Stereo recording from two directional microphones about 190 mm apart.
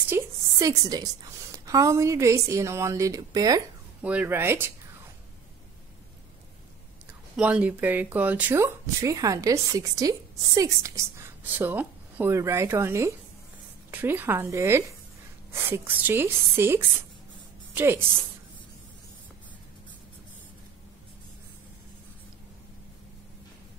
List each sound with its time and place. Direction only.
0.1 s a woman's voice: 15° right (ahead or behind)
4.0 s speech: 10° right (ahead or behind)
7.3 s speech: 5° right (ahead or behind)